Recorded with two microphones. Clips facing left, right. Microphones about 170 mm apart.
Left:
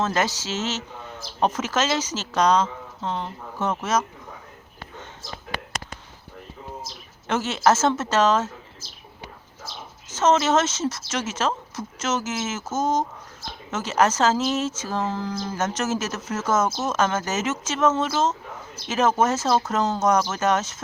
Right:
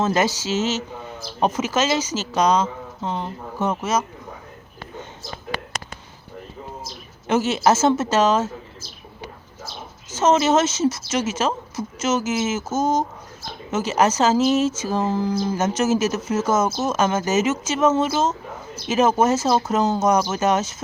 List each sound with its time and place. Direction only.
0.0 s speech: 10° right (ahead or behind)
7.3 s speech: 10° right (ahead or behind)
10.2 s speech: 5° right (ahead or behind)